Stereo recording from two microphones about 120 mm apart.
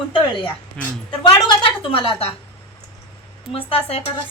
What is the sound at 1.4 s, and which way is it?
Speech, 40° left (ahead or behind).